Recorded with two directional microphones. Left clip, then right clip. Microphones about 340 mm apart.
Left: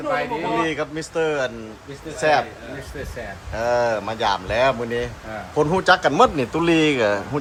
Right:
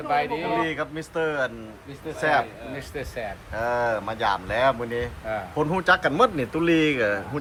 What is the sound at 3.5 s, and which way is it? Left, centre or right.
Speech, centre.